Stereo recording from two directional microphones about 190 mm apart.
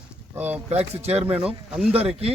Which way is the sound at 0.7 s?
35° right (ahead or behind).